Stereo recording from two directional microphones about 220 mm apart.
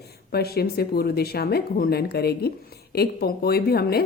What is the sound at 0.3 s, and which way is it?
Speech, 45° left (ahead or behind).